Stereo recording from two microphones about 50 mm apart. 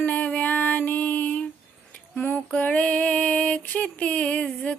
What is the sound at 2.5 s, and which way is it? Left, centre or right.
Female singing, left.